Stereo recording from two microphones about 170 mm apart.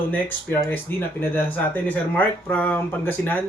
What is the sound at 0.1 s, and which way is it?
Speech, 10° left (ahead or behind).